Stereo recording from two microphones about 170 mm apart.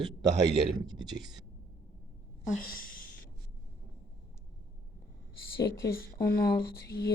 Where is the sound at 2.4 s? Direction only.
60° left (ahead or behind).